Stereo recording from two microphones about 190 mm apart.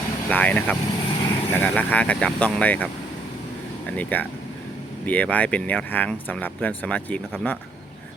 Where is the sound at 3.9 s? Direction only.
10° left (ahead or behind).